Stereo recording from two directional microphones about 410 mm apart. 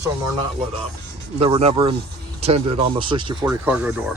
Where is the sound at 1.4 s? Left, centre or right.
Centre.